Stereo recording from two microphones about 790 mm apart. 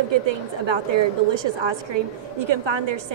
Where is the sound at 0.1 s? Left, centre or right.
Right.